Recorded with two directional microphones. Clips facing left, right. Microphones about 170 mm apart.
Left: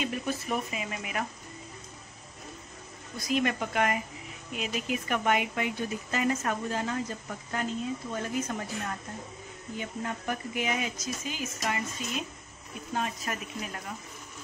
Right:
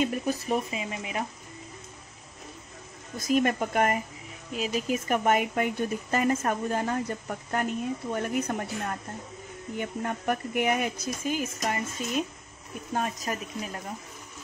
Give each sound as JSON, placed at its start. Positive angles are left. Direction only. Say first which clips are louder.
{"t": 0.0, "sound": "speech", "louder": "right 4 dB", "side_deg": -35}
{"t": 3.2, "sound": "speech", "louder": "right 4 dB", "side_deg": -45}
{"t": 9.8, "sound": "speech", "louder": "right 4 dB", "side_deg": -55}